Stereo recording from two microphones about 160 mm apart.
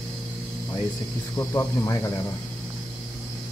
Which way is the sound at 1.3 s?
20° left (ahead or behind).